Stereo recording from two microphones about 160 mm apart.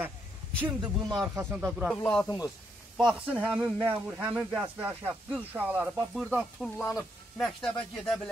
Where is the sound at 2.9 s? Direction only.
10° right (ahead or behind).